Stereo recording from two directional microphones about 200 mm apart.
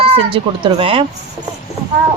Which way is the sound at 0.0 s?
25° right (ahead or behind).